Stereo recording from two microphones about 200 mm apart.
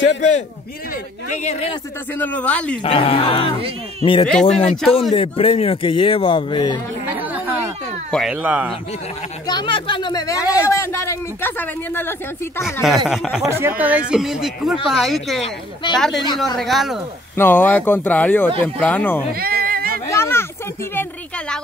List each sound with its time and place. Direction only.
1.3 s speech: 35° left (ahead or behind)
2.1 s speech: 10° left (ahead or behind)
2.8 s speech: 30° left (ahead or behind)
4.3 s speech: centre (ahead or behind)
5.1 s speech: 25° left (ahead or behind)
7.2 s chatter: 10° right (ahead or behind)
8.1 s speech: centre (ahead or behind)
9.5 s speech: 25° left (ahead or behind)
12.8 s speech: centre (ahead or behind)
15.4 s speech: 25° left (ahead or behind)
16.5 s speech: centre (ahead or behind)
17.4 s speech: 10° left (ahead or behind)
19.3 s a sound: 50° right (ahead or behind)
20.1 s a sound: 10° left (ahead or behind)